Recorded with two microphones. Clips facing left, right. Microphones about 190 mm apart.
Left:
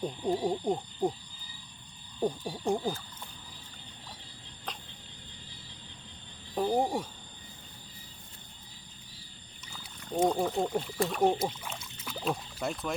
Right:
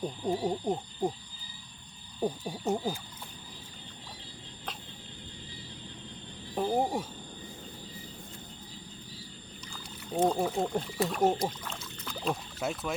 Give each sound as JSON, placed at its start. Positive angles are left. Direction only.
{"t": 0.0, "sound": "speech", "side_deg": -5}
{"t": 2.2, "sound": "speech", "side_deg": -5}
{"t": 6.6, "sound": "speech", "side_deg": 0}
{"t": 10.1, "sound": "speech", "side_deg": -5}
{"t": 11.4, "sound": "speech", "side_deg": 10}